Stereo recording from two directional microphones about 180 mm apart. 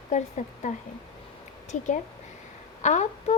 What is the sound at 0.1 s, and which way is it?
Speech, 40° left (ahead or behind).